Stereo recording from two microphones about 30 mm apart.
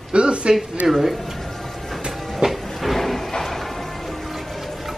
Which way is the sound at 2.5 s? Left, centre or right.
Centre.